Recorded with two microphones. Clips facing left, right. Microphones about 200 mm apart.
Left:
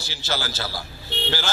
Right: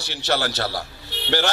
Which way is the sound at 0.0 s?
65° right (ahead or behind).